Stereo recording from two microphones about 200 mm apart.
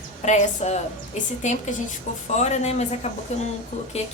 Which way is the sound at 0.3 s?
35° left (ahead or behind).